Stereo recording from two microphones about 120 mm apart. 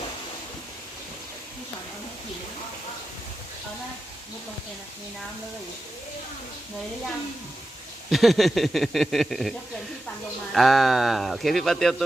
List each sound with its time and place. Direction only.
8.1 s speech: centre (ahead or behind)